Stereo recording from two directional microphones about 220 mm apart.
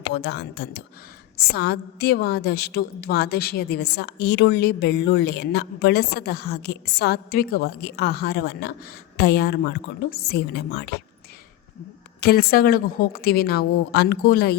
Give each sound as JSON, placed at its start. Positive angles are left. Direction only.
{"t": 0.1, "sound": "a woman's voice", "side_deg": 50}
{"t": 12.2, "sound": "a woman's voice", "side_deg": 45}